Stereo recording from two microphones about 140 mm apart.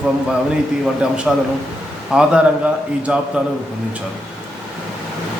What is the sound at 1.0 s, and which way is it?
A man's voice, 5° right (ahead or behind).